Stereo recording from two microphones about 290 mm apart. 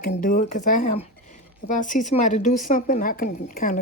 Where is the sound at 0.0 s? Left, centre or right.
Left.